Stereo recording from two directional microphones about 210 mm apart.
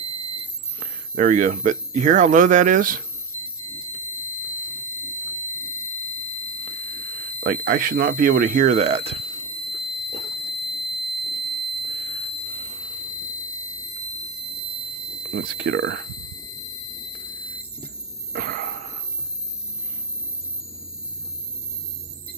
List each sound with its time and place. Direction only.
0.7 s speech: 40° right (ahead or behind)
7.3 s speech: 45° right (ahead or behind); by 9.4 s 25° right (ahead or behind)
9.7 s fire alarm: 25° right (ahead or behind)
15.3 s speech: 45° right (ahead or behind)
18.3 s a sound: 45° right (ahead or behind)